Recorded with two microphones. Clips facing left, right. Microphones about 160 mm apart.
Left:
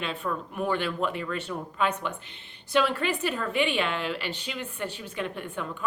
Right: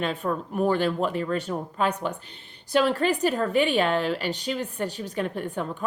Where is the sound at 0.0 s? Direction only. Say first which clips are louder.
Right 4 dB; 40° right (ahead or behind).